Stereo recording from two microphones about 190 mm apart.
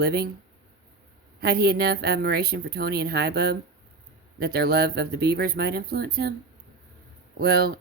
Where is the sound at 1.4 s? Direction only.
55° right (ahead or behind).